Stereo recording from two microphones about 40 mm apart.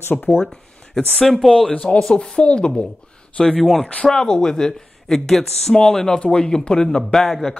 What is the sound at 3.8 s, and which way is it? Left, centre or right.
Speech, left.